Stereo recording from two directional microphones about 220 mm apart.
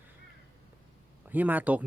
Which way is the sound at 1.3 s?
10° right (ahead or behind).